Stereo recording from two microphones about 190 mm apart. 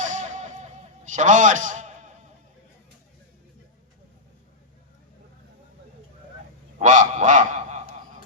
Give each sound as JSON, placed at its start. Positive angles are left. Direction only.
{"t": 0.0, "sound": "music", "side_deg": -40}
{"t": 6.7, "sound": "goose", "side_deg": -45}